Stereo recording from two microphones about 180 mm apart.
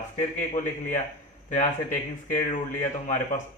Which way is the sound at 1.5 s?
45° left (ahead or behind).